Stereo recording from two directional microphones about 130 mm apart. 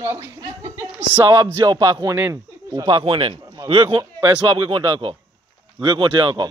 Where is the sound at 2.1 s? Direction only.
20° right (ahead or behind).